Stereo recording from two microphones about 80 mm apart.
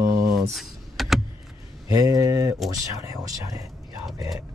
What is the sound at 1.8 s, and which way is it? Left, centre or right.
Speech, right.